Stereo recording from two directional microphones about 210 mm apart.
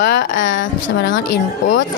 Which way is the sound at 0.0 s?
55° left (ahead or behind).